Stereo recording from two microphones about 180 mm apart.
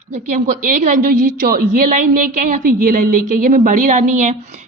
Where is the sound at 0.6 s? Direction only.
55° right (ahead or behind).